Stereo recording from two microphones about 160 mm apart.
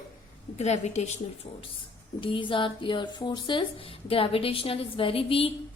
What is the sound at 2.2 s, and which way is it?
A woman's voice, 30° left (ahead or behind).